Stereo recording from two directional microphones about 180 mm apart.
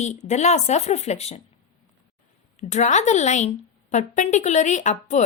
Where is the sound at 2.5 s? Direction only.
40° left (ahead or behind).